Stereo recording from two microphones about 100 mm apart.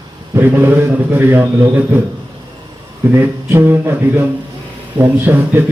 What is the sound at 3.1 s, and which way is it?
A man's voice, 20° right (ahead or behind).